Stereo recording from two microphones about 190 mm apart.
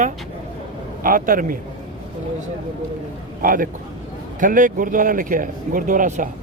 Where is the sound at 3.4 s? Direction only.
45° right (ahead or behind).